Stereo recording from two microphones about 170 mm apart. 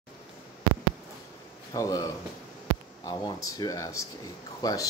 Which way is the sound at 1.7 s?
20° left (ahead or behind).